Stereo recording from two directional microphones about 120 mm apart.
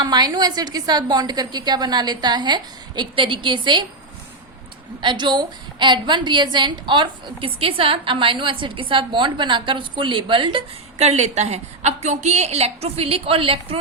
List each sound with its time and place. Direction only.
0.0 s a woman's voice: 35° right (ahead or behind)
4.9 s a woman's voice: 40° right (ahead or behind)
10.9 s a woman's voice: 65° right (ahead or behind); by 13.7 s 50° right (ahead or behind)